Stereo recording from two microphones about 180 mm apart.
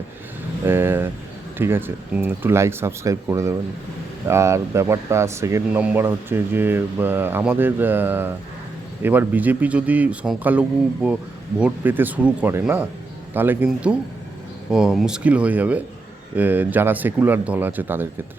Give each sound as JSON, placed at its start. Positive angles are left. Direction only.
{"t": 0.6, "sound": "speech", "side_deg": -15}